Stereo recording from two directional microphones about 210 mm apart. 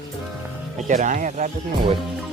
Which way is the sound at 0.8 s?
35° right (ahead or behind).